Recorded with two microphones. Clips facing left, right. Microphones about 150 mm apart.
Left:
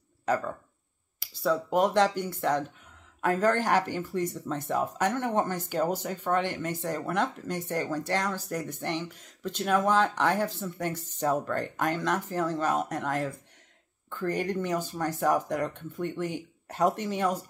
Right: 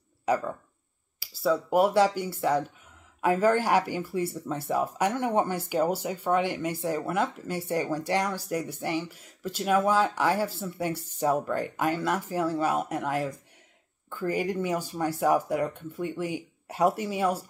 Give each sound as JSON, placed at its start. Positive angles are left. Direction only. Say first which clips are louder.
{"t": 0.3, "sound": "speech", "louder": "right 2 dB", "side_deg": -10}